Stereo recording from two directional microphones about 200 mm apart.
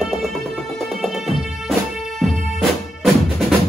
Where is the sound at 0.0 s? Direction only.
Centre (ahead or behind).